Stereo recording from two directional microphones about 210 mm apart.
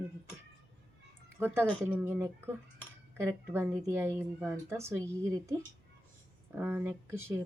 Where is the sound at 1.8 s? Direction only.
10° right (ahead or behind).